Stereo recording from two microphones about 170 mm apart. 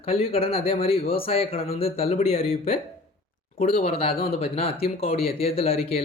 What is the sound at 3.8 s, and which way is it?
A man's voice, 35° left (ahead or behind).